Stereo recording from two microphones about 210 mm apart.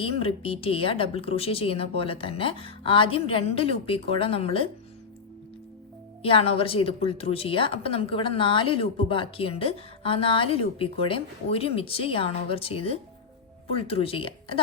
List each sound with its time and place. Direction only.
0.0 s speech: 25° left (ahead or behind)
6.2 s speech: 25° left (ahead or behind)